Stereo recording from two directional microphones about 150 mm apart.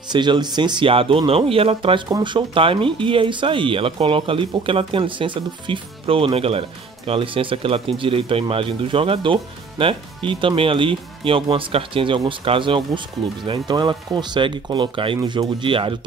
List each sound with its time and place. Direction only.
0.1 s speech: 30° right (ahead or behind)